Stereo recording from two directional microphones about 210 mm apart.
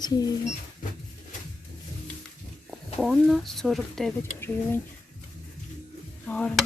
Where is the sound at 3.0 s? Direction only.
Centre (ahead or behind).